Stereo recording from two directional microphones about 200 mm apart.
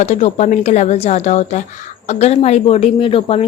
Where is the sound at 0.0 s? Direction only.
35° left (ahead or behind).